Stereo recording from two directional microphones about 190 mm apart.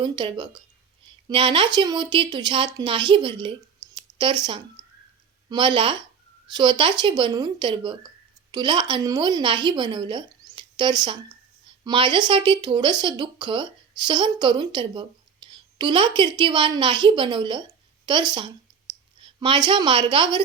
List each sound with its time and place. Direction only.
0.0 s speech: 25° right (ahead or behind)
10.5 s a sound: 25° right (ahead or behind)
11.8 s speech: 25° right (ahead or behind)